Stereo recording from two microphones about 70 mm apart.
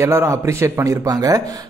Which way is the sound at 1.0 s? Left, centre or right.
Right.